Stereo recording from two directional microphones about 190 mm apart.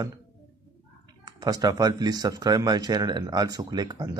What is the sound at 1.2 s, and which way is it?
Speech, 20° right (ahead or behind).